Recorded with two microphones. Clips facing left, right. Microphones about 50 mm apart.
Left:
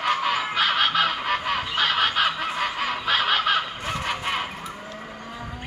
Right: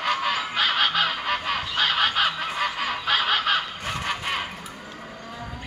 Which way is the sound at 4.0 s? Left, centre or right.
Centre.